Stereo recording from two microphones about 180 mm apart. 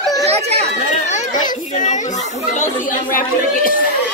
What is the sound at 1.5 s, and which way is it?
Children playing, 45° left (ahead or behind).